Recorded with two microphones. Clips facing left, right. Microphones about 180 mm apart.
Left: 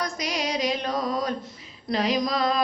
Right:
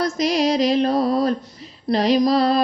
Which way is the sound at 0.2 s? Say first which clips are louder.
Right 11 dB; 35° right (ahead or behind).